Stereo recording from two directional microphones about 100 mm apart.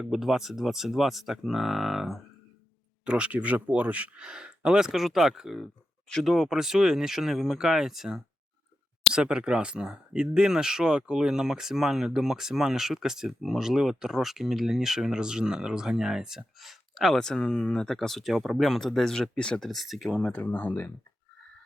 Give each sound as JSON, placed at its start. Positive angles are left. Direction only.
{"t": 0.0, "sound": "speech", "side_deg": -5}
{"t": 20.4, "sound": "speech", "side_deg": 15}